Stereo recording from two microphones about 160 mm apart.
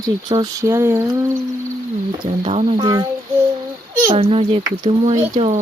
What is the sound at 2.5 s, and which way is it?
Speech, 45° right (ahead or behind).